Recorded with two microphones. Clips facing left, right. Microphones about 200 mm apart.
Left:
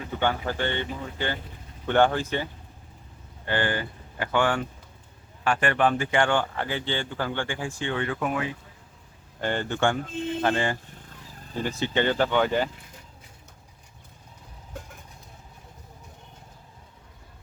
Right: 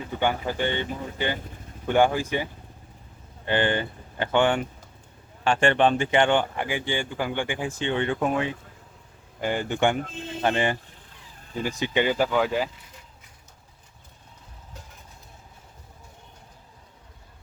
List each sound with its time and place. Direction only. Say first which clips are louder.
0.2 s speech: right 1 dB; 15° right (ahead or behind)
9.4 s speech: right 1 dB; 10° right (ahead or behind)